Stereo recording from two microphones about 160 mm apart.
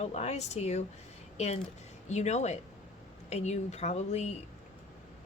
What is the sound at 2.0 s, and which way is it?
A woman's voice, 45° left (ahead or behind).